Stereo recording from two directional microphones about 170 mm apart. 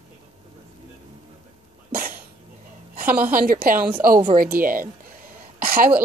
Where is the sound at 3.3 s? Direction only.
55° right (ahead or behind).